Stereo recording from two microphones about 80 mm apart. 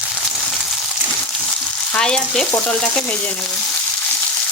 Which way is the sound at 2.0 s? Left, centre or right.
Centre.